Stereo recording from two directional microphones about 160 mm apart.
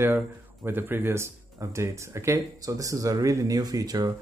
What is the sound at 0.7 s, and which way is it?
Speech, 15° right (ahead or behind).